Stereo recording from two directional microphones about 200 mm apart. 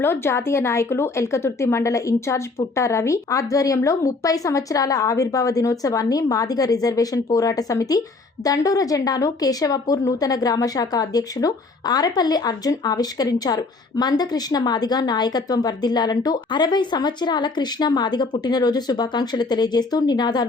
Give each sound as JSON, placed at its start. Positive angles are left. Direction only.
{"t": 0.0, "sound": "a woman's voice", "side_deg": 10}